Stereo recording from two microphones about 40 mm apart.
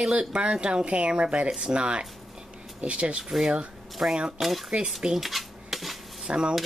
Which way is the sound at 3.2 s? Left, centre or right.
Centre.